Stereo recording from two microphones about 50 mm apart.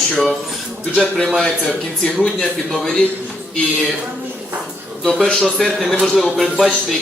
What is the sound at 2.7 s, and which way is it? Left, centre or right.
Speech, centre.